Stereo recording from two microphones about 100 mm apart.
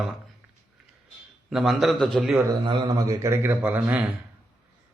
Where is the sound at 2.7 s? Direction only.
55° right (ahead or behind).